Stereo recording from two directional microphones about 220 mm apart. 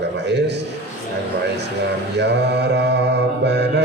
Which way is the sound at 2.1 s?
50° right (ahead or behind).